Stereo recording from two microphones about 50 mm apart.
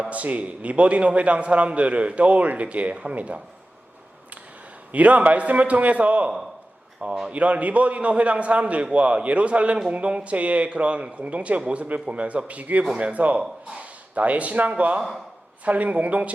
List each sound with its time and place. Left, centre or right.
0.0 s a man's voice: right
4.9 s a man's voice: right